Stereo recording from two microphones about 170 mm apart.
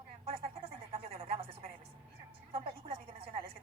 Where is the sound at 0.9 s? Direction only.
35° right (ahead or behind).